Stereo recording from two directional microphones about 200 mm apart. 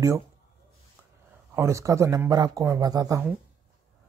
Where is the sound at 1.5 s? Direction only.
15° right (ahead or behind).